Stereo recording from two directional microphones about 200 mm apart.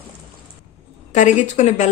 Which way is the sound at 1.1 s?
35° left (ahead or behind).